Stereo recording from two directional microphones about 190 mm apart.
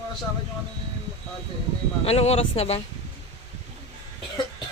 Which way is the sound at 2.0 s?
35° left (ahead or behind).